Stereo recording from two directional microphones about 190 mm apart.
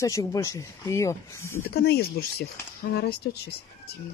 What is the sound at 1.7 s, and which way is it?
Speech, 55° left (ahead or behind).